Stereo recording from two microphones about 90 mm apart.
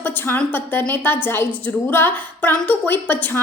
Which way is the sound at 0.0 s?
20° left (ahead or behind).